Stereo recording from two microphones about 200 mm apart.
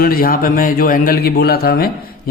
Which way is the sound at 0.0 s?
45° left (ahead or behind).